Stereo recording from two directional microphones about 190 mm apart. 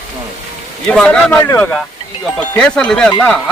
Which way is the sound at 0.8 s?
5° left (ahead or behind).